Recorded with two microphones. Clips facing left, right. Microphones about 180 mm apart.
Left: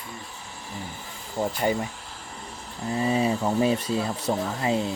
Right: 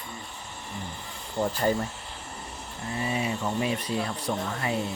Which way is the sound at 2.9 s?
30° left (ahead or behind).